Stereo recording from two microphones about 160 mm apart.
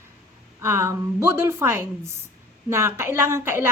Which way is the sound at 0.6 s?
15° right (ahead or behind).